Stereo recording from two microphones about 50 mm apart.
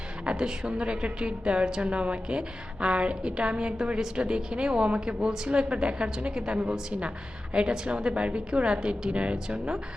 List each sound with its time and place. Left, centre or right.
0.3 s a woman's voice: centre